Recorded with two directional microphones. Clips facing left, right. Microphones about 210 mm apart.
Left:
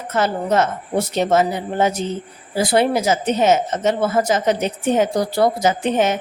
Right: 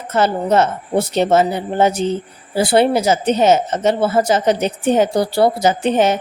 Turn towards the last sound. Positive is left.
turn(degrees=-35)  # may be behind; listen again after turning